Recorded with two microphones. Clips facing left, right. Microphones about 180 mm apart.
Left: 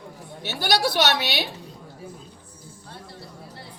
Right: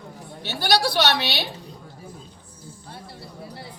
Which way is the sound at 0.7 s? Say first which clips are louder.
Right 1 dB; 20° left (ahead or behind).